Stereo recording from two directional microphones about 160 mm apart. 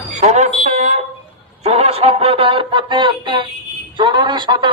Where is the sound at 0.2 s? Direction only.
45° right (ahead or behind); by 3.4 s 30° right (ahead or behind).